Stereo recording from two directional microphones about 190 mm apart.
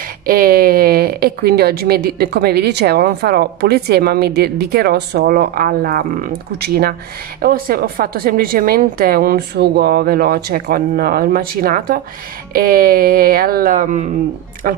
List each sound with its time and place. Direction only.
0.3 s a woman's voice: 50° right (ahead or behind)